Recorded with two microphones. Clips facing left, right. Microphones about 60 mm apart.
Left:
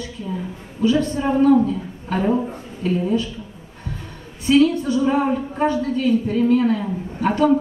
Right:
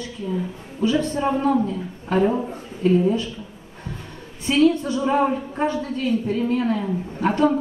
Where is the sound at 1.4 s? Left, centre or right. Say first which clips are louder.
Left 5 dB; centre.